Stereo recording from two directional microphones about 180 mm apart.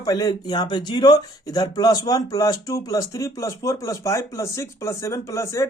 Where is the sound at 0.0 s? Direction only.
20° left (ahead or behind).